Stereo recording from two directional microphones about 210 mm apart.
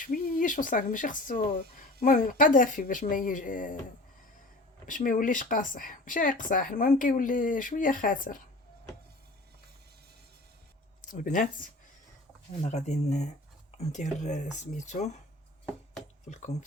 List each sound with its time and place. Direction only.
0.0 s speech: 40° left (ahead or behind)
4.9 s speech: 40° left (ahead or behind)
11.0 s speech: 40° left (ahead or behind)
12.6 s speech: 35° left (ahead or behind)
16.3 s speech: 35° left (ahead or behind)